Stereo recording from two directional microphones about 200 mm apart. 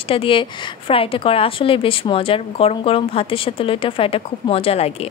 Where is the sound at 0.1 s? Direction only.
25° left (ahead or behind).